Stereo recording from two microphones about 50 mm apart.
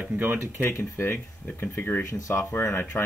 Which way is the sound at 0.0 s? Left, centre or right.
Right.